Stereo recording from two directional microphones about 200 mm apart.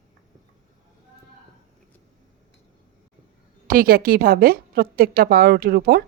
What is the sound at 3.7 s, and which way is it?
A woman's voice, 45° right (ahead or behind).